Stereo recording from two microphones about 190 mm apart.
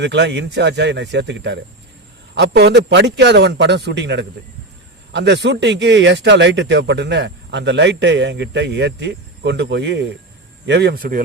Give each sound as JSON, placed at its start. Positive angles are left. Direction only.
{"t": 0.0, "sound": "a man's voice", "side_deg": -65}